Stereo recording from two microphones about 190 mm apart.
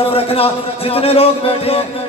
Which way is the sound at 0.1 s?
30° left (ahead or behind).